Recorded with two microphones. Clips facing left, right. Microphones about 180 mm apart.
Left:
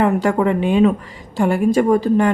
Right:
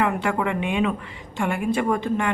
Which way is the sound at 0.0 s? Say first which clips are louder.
Left 7 dB; 40° left (ahead or behind).